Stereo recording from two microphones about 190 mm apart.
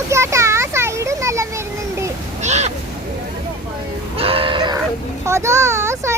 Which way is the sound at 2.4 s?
35° right (ahead or behind).